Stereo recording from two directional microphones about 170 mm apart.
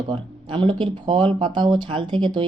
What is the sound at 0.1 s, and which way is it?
Speech, 30° right (ahead or behind).